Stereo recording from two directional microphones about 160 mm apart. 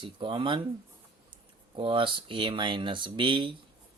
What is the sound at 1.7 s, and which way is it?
Speech, 30° right (ahead or behind).